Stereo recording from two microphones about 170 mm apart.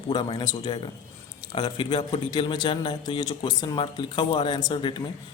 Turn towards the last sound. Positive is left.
turn(degrees=30)  # may be behind; listen again after turning